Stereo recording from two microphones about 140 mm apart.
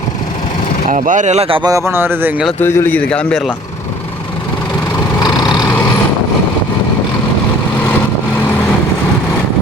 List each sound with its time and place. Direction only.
0.9 s speech: 65° right (ahead or behind); by 1.6 s 45° right (ahead or behind)
1.6 s speech: 20° right (ahead or behind)
2.6 s a man's voice: 15° left (ahead or behind)
5.2 s vehicle: 30° left (ahead or behind)